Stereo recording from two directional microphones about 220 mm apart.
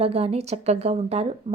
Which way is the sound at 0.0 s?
25° right (ahead or behind).